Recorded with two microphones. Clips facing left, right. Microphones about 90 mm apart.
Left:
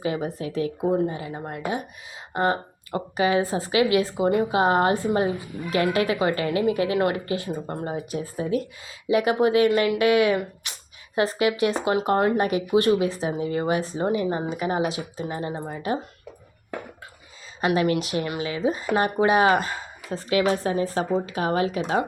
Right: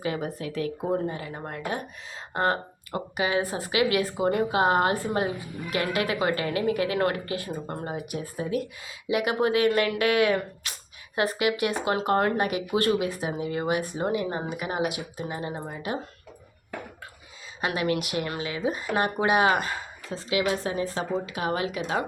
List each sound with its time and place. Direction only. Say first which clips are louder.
0.0 s speech: left 3 dB; 25° left (ahead or behind)
18.0 s speech: left 3 dB; 25° left (ahead or behind)
20.1 s a woman's voice: left 4 dB; 50° left (ahead or behind)
20.5 s a woman's voice: left 4 dB; 35° left (ahead or behind)